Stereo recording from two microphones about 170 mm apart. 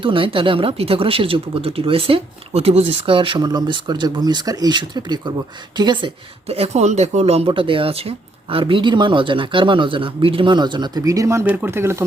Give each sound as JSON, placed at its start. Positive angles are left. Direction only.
{"t": 0.0, "sound": "speech", "side_deg": -30}
{"t": 6.5, "sound": "speech", "side_deg": -40}